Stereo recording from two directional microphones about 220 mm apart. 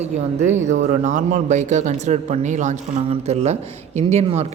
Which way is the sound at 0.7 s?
35° right (ahead or behind).